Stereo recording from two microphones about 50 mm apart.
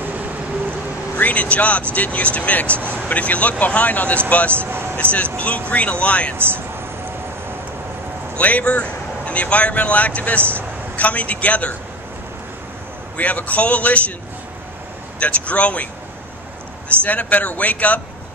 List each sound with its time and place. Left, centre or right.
1.1 s speech: left
2.7 s a man's voice: right
3.1 s speech: left
4.5 s speech: right
5.1 s speech: left
6.3 s a man's voice: right
8.4 s speech: left
13.2 s speech: left
15.1 s speech: left
17.0 s speech: left